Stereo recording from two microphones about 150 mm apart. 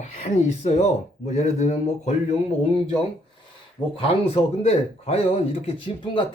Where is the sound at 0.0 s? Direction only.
50° left (ahead or behind).